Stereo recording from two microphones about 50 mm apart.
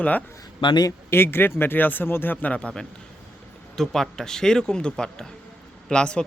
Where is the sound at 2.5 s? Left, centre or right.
Left.